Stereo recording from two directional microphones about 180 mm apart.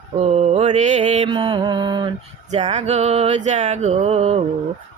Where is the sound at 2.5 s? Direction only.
40° right (ahead or behind).